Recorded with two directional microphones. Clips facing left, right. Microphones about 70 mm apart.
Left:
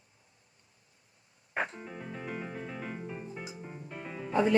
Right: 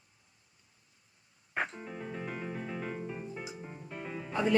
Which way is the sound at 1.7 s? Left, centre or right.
Centre.